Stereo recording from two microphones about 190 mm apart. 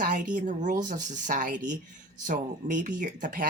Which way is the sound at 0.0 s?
45° right (ahead or behind).